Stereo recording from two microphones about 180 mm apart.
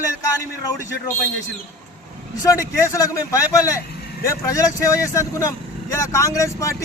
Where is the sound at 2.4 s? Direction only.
20° left (ahead or behind).